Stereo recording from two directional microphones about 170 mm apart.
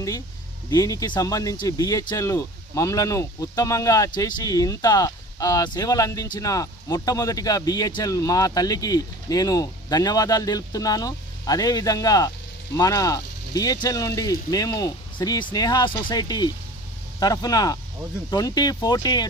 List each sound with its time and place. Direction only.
0.7 s speech: 20° left (ahead or behind)